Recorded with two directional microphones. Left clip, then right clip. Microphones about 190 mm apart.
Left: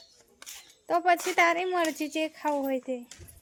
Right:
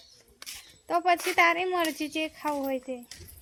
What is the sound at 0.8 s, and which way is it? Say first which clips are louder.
Speech: even; 15° left (ahead or behind).